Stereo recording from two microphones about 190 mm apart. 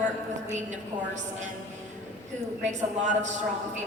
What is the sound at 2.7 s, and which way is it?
Speech, 40° right (ahead or behind).